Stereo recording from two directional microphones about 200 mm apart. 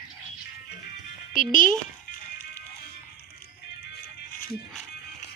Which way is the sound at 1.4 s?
40° left (ahead or behind).